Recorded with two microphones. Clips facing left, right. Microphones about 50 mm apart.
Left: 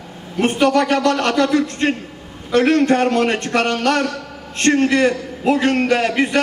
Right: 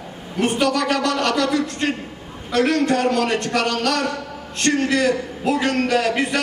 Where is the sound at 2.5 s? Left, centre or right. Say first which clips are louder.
Left 4 dB; left.